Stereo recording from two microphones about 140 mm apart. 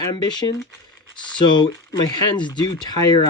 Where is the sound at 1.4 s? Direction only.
35° left (ahead or behind).